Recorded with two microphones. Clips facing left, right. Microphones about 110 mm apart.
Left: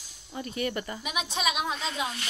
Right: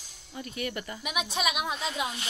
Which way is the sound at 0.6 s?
Centre (ahead or behind).